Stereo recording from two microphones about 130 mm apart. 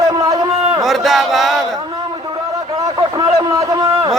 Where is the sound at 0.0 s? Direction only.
30° right (ahead or behind).